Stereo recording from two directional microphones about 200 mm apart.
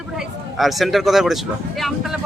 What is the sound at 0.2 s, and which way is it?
Speech, centre (ahead or behind).